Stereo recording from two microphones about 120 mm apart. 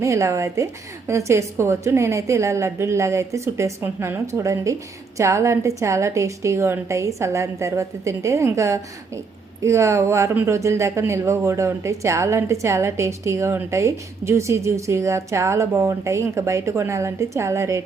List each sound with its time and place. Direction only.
0.0 s a woman's voice: 25° right (ahead or behind)